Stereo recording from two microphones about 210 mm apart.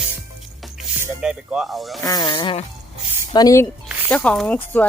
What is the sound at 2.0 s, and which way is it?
Speech, 15° left (ahead or behind).